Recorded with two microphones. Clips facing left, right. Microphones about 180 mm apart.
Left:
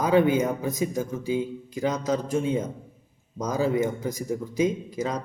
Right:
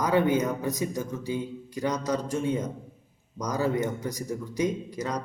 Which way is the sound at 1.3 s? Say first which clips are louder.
Left 7 dB; 25° left (ahead or behind).